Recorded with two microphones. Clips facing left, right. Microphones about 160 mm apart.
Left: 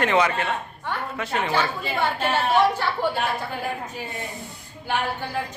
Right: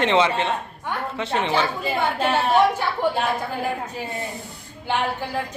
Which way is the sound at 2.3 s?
15° right (ahead or behind).